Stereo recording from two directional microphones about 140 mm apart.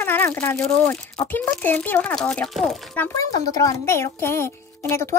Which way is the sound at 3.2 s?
25° left (ahead or behind).